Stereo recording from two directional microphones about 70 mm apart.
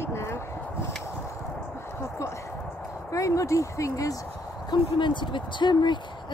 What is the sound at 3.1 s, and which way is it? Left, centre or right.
Speech, left.